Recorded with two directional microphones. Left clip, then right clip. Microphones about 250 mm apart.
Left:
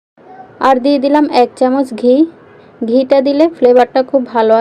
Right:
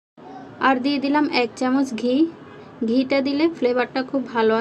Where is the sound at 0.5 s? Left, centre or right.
Centre.